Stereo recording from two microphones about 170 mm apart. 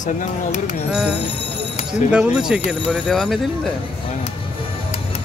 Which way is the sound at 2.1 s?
5° right (ahead or behind).